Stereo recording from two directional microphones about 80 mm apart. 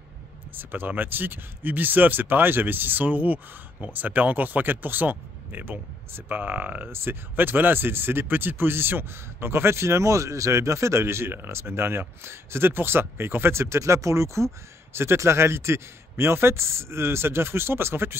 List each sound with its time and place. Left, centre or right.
0.6 s speech: right